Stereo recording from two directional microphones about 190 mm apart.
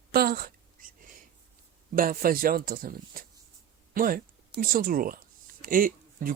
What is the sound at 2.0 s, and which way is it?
Speech, 50° right (ahead or behind).